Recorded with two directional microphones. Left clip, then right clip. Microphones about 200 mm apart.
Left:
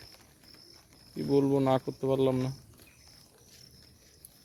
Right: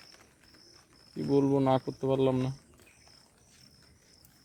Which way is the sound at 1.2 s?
Centre (ahead or behind).